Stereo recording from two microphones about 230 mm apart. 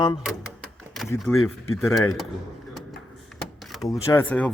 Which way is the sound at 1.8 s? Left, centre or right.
Centre.